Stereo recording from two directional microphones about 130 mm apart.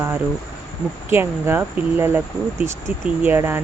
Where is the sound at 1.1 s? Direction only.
20° right (ahead or behind).